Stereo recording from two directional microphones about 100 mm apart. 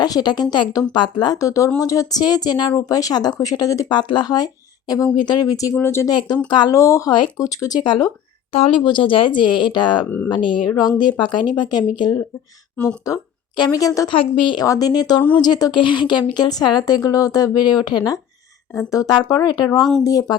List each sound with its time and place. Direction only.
0.0 s speech: 45° left (ahead or behind); by 6.1 s 25° left (ahead or behind)
6.1 s speech: 45° left (ahead or behind)
6.7 s speech: 30° left (ahead or behind); by 8.1 s 45° left (ahead or behind)
8.5 s speech: 90° left
8.8 s speech: 55° left (ahead or behind)
12.7 s speech: 10° left (ahead or behind)
13.6 s speech: 35° left (ahead or behind)
14.1 s a woman's voice: 55° left (ahead or behind)
14.6 s speech: 40° left (ahead or behind)
15.7 s speech: 50° left (ahead or behind)
19.8 s speech: 5° left (ahead or behind)
20.1 s speech: 35° left (ahead or behind)